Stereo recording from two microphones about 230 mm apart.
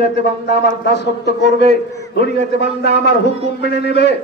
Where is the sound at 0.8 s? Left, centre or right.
Left.